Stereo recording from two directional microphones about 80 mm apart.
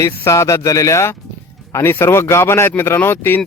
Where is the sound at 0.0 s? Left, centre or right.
Left.